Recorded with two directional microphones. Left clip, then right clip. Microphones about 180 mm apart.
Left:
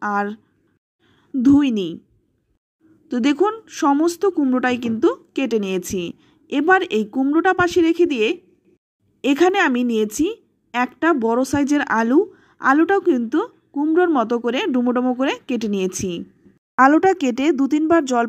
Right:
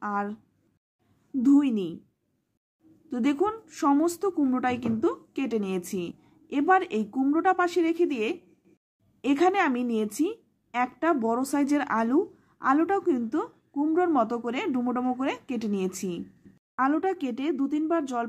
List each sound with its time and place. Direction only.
0.0 s a woman's voice: 30° left (ahead or behind)
1.4 s a woman's voice: 25° left (ahead or behind)
3.1 s a woman's voice: 25° left (ahead or behind)
16.7 s speech: 40° left (ahead or behind)